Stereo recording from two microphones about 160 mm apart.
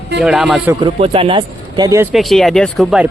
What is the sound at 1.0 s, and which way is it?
Speech, 35° right (ahead or behind).